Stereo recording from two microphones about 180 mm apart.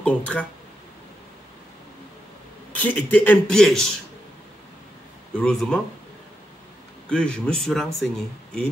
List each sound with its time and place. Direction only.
0.0 s speech: 5° left (ahead or behind)
2.7 s a man's voice: 10° left (ahead or behind)
5.3 s speech: 5° left (ahead or behind)
7.1 s speech: 5° left (ahead or behind)